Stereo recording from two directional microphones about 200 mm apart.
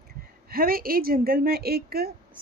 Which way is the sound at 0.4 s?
45° right (ahead or behind).